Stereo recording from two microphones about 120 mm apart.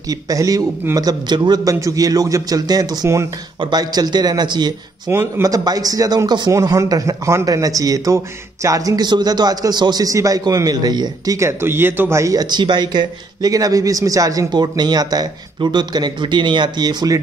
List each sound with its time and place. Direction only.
0.1 s a man's voice: 30° right (ahead or behind)
11.3 s speech: 20° right (ahead or behind)